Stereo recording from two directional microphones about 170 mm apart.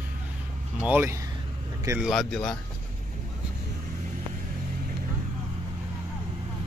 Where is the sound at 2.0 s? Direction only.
5° left (ahead or behind).